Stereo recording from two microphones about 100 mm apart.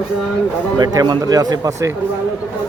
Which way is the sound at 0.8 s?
40° right (ahead or behind).